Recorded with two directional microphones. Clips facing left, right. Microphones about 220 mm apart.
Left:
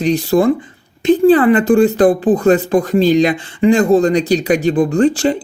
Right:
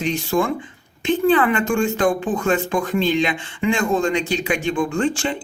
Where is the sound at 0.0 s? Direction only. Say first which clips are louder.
Left 8 dB; 35° left (ahead or behind).